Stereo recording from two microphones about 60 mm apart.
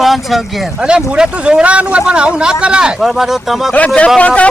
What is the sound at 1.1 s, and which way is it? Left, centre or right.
Speech, centre.